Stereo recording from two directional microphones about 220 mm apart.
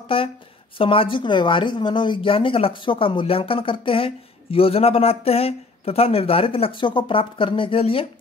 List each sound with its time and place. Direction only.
0.1 s speech: 25° left (ahead or behind)